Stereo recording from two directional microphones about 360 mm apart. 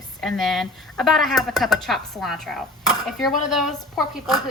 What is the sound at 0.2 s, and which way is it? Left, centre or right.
Speech, centre.